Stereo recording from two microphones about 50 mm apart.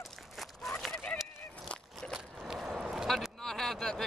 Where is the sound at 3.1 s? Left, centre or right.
Centre.